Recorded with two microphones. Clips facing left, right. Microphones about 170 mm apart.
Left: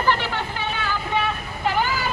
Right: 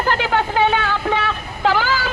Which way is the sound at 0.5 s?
70° right (ahead or behind).